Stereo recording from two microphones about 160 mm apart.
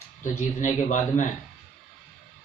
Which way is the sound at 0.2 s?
50° left (ahead or behind).